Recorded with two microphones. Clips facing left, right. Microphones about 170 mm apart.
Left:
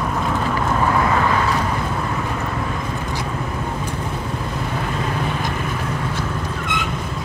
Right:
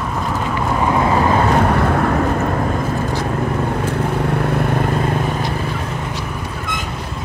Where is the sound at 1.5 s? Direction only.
65° right (ahead or behind).